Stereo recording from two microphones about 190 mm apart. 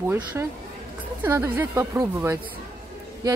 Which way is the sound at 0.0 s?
10° right (ahead or behind).